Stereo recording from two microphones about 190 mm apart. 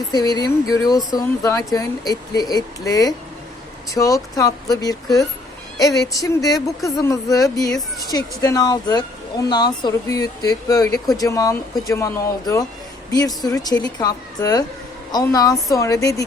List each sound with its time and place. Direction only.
0.1 s speech: 20° left (ahead or behind)